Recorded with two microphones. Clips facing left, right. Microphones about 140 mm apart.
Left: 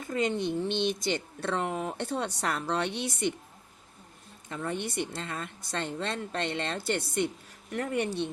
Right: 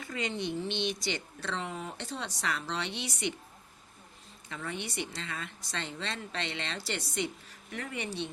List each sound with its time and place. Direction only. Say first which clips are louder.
0.0 s speech: left 6 dB; 45° left (ahead or behind)
4.4 s speech: left 5 dB; 45° left (ahead or behind)